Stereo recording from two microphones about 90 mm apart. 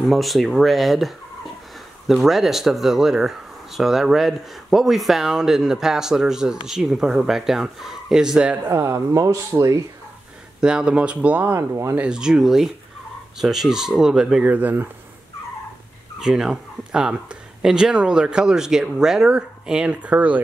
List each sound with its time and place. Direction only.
0.1 s speech: centre (ahead or behind)
8.6 s speech: 30° right (ahead or behind)
10.6 s speech: 10° right (ahead or behind)
14.4 s speech: 20° right (ahead or behind)
16.2 s speech: 5° right (ahead or behind)